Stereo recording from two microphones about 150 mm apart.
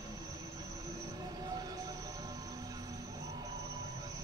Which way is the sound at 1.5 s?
25° right (ahead or behind).